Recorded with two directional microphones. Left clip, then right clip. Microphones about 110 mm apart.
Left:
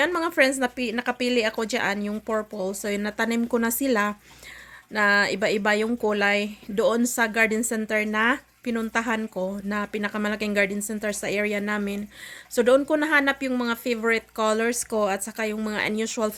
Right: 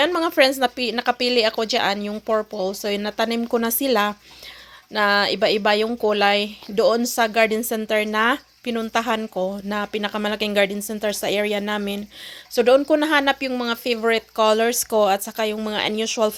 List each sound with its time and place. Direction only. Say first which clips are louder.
0.0 s speech: right 4 dB; 25° right (ahead or behind)